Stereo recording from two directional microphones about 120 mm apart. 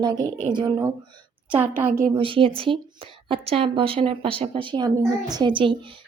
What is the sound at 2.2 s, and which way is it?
A woman's voice, 45° right (ahead or behind).